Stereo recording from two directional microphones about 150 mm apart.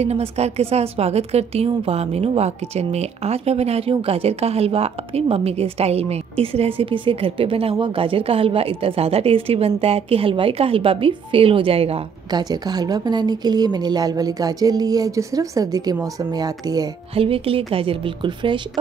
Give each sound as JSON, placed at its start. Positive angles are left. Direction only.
{"t": 0.0, "sound": "a woman's voice", "side_deg": -45}
{"t": 12.3, "sound": "a woman's voice", "side_deg": -25}
{"t": 17.1, "sound": "a woman's voice", "side_deg": -40}